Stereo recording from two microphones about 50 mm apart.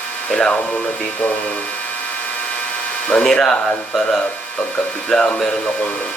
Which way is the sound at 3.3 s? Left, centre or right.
Centre.